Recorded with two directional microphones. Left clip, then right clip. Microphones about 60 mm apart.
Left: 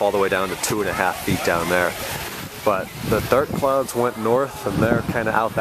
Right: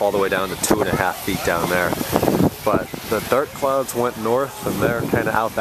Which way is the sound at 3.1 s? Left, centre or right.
Centre.